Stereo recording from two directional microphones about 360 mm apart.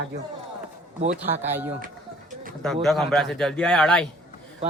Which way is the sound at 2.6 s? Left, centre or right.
Centre.